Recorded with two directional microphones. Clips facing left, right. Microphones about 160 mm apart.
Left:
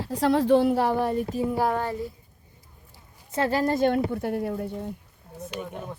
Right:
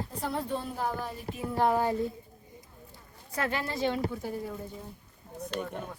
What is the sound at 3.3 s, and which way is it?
Speech, 35° left (ahead or behind).